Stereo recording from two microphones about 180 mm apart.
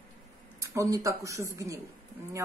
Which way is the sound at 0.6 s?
15° right (ahead or behind).